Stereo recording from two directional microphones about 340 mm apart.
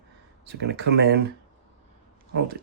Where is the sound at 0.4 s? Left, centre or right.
Right.